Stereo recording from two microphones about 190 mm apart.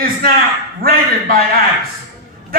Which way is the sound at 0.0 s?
50° right (ahead or behind).